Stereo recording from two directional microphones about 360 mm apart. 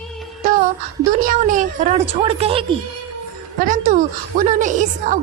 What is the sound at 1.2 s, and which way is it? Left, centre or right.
Speech, right.